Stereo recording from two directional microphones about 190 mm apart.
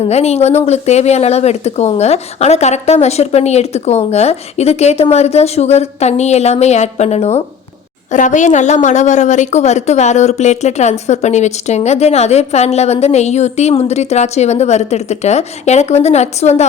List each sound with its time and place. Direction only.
0.0 s a woman's voice: 35° left (ahead or behind)